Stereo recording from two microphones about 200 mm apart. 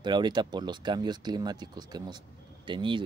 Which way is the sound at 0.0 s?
20° right (ahead or behind).